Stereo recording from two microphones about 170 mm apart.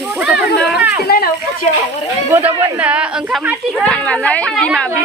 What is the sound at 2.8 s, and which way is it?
Speech, 10° right (ahead or behind).